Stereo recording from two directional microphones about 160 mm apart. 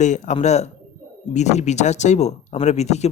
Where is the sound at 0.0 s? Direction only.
45° left (ahead or behind).